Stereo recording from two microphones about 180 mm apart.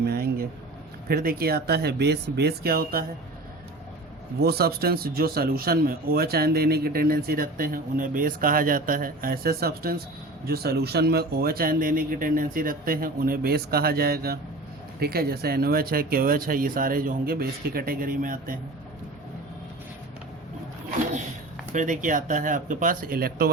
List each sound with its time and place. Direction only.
0.0 s a sound: 60° right (ahead or behind)
1.0 s speech: 55° right (ahead or behind)
4.4 s speech: 60° right (ahead or behind)
21.7 s speech: 45° right (ahead or behind)